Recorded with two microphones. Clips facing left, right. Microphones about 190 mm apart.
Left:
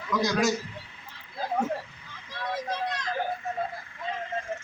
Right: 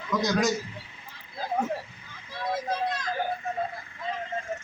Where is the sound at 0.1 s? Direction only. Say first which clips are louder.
Even; 20° right (ahead or behind).